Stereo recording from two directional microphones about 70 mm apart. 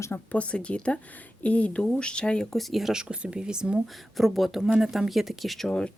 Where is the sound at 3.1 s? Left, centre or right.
Centre.